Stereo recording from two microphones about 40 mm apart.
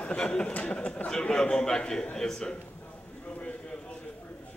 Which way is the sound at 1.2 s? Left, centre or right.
Left.